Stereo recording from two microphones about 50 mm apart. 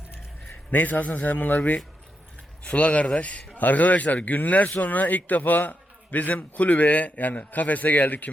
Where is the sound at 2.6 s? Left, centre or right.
Left.